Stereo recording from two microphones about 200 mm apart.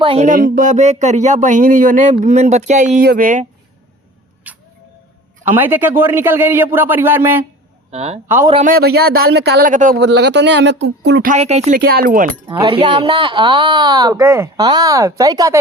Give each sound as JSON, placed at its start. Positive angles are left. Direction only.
{"t": 0.0, "sound": "speech", "side_deg": -30}
{"t": 4.4, "sound": "a sound", "side_deg": -10}
{"t": 5.5, "sound": "speech", "side_deg": -10}
{"t": 7.9, "sound": "speech", "side_deg": -30}
{"t": 8.6, "sound": "speech", "side_deg": -50}
{"t": 9.7, "sound": "speech", "side_deg": -40}
{"t": 10.0, "sound": "speech", "side_deg": -60}
{"t": 11.3, "sound": "speech", "side_deg": -35}
{"t": 11.8, "sound": "speech", "side_deg": -50}
{"t": 12.5, "sound": "a woman's voice", "side_deg": -25}